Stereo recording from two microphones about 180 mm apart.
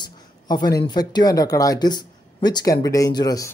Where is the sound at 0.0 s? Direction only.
25° left (ahead or behind).